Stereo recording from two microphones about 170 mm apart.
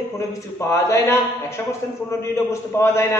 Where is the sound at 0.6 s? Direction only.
15° left (ahead or behind).